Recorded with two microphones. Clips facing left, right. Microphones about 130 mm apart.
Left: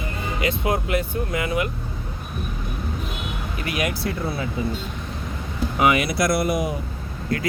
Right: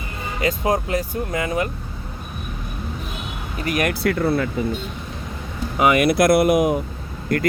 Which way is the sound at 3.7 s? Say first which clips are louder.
Right 5 dB; 55° right (ahead or behind).